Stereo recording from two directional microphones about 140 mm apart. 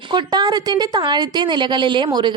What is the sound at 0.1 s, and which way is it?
Speech, 30° right (ahead or behind).